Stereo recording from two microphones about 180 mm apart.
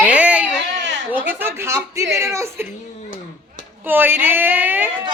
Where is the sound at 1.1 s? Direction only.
10° right (ahead or behind).